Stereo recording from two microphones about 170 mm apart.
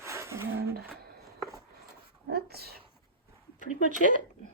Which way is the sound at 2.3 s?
65° right (ahead or behind).